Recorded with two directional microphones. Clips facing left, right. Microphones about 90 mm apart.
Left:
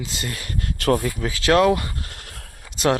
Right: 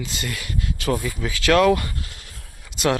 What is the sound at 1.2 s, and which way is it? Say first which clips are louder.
Speech: right 3 dB; 30° left (ahead or behind).